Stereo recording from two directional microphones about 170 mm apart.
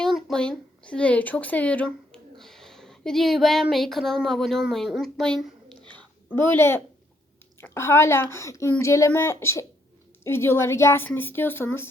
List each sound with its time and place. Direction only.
0.0 s a woman's voice: centre (ahead or behind)